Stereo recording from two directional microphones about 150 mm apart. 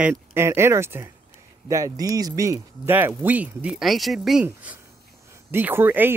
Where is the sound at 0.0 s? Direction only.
10° right (ahead or behind).